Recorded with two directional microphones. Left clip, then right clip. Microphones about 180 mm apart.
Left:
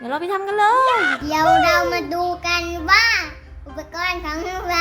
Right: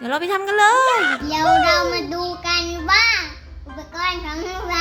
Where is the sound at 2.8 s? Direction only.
20° left (ahead or behind).